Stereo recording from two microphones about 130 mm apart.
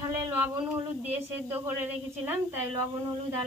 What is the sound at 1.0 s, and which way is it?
A woman's voice, 15° right (ahead or behind).